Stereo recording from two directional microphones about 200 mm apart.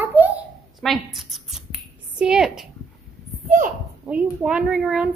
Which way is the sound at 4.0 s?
5° right (ahead or behind).